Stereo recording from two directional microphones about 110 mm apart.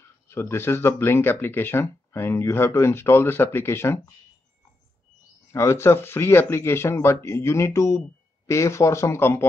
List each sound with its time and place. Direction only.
0.3 s speech: 25° left (ahead or behind)
5.5 s speech: 25° left (ahead or behind)